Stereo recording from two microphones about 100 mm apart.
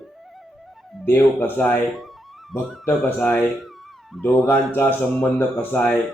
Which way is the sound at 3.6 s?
Centre (ahead or behind).